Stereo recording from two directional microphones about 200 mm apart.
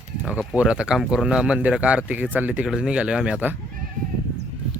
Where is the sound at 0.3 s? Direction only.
5° right (ahead or behind).